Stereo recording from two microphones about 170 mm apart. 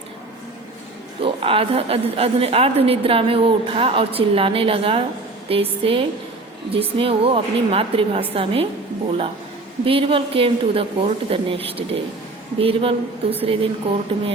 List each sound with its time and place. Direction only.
1.2 s a woman's voice: 35° right (ahead or behind)